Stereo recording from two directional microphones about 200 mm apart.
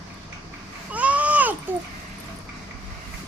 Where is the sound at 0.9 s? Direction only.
5° right (ahead or behind).